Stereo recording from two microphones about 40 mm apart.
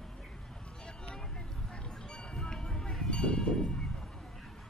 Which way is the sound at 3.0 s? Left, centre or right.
Left.